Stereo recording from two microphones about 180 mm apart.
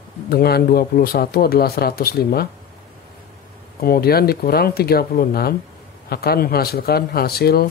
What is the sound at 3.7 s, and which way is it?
Speech, 55° left (ahead or behind).